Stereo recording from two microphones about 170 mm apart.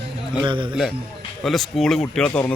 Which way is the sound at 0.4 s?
30° right (ahead or behind).